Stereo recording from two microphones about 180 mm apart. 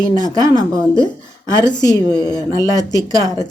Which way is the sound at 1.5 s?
25° left (ahead or behind).